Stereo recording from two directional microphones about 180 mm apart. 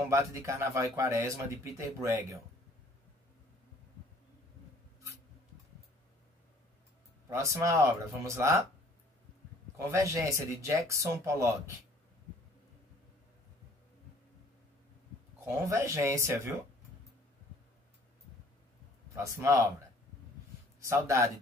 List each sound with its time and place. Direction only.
0.0 s a man's voice: 15° right (ahead or behind)
7.2 s a man's voice: 15° right (ahead or behind)
9.8 s a man's voice: 15° right (ahead or behind)
15.4 s a man's voice: 15° right (ahead or behind)
19.1 s a man's voice: 15° right (ahead or behind)
20.8 s a man's voice: 15° right (ahead or behind)